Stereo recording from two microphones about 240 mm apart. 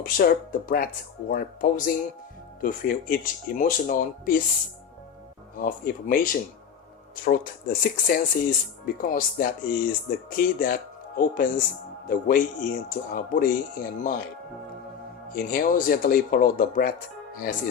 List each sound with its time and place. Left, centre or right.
0.0 s speech: left
5.5 s speech: left
15.3 s speech: left